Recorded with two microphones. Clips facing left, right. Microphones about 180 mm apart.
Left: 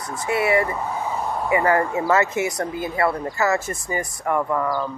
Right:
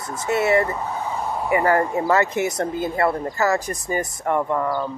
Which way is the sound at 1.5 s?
15° left (ahead or behind).